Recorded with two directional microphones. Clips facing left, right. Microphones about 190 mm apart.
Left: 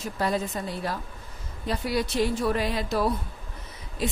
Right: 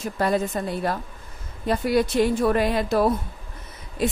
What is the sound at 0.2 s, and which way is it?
A woman's voice, 55° right (ahead or behind).